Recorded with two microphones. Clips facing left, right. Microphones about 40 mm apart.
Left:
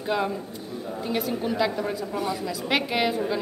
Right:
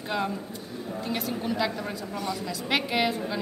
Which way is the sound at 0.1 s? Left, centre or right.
Centre.